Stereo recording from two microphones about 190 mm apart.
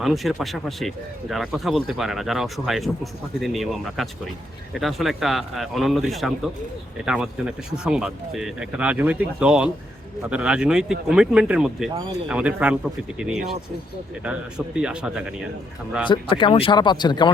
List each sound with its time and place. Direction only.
0.0 s speech: centre (ahead or behind)
14.8 s speech: 5° right (ahead or behind)
16.0 s speech: 25° left (ahead or behind)